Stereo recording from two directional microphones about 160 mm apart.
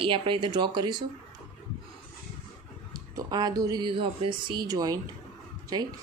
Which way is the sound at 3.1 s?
25° right (ahead or behind).